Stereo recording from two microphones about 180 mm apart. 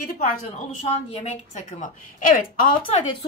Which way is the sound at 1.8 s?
45° left (ahead or behind).